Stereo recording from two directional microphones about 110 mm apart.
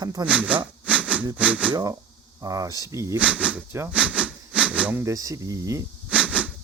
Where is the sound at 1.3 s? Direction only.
15° right (ahead or behind).